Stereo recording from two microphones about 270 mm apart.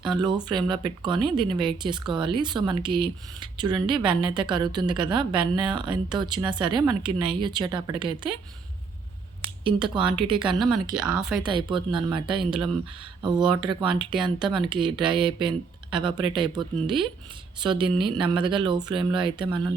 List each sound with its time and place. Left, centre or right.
0.0 s speech: centre
9.6 s speech: centre
10.9 s speech: centre
11.3 s speech: centre